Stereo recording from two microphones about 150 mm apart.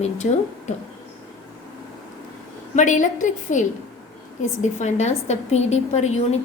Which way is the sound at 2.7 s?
55° left (ahead or behind).